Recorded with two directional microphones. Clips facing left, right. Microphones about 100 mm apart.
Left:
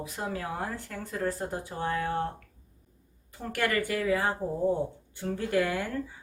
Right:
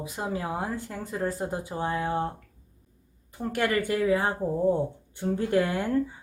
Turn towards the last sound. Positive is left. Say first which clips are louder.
# right 3 dB
turn(degrees=-25)  # may be behind; listen again after turning